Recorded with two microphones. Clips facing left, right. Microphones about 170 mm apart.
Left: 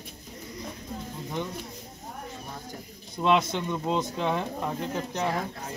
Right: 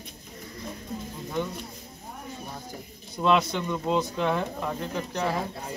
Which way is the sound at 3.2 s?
15° left (ahead or behind).